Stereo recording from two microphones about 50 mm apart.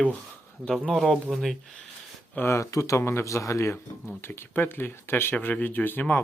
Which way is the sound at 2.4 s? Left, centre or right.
Left.